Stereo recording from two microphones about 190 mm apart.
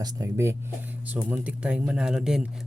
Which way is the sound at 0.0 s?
15° right (ahead or behind).